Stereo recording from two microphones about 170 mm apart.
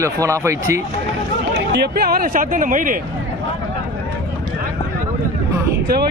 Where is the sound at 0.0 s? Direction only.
15° right (ahead or behind).